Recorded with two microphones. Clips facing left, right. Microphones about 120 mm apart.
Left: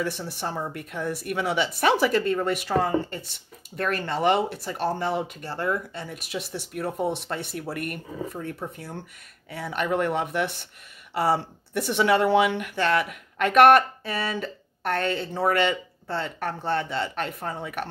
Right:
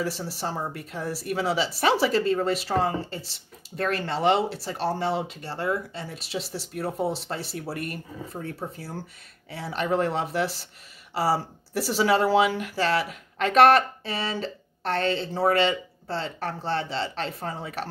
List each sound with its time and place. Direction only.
0.0 s speech: 30° right (ahead or behind)